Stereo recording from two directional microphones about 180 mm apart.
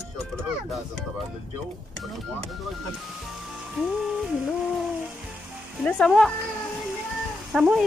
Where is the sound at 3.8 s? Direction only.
Centre (ahead or behind).